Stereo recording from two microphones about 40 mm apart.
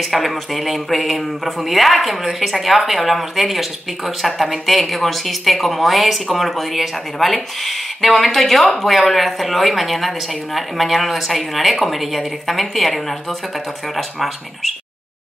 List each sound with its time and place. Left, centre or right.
0.0 s speech: centre